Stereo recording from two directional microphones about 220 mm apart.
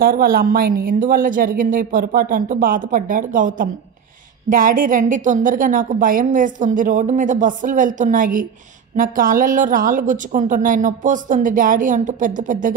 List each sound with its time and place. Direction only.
0.0 s a woman's voice: 40° right (ahead or behind)